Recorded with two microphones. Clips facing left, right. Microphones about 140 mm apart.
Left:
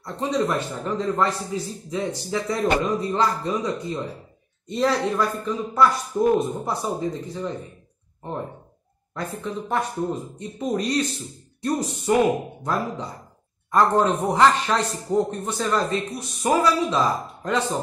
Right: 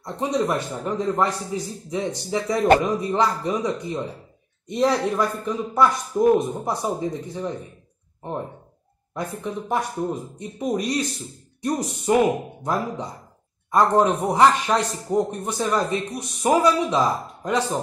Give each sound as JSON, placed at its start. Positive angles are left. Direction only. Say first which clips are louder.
{"t": 0.0, "sound": "a man's voice", "louder": "even", "side_deg": -15}
{"t": 9.1, "sound": "a man's voice", "louder": "right 1 dB", "side_deg": -15}